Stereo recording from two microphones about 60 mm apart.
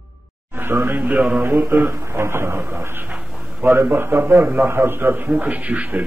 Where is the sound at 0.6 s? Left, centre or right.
Right.